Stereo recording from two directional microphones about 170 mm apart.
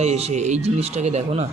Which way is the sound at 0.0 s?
40° right (ahead or behind).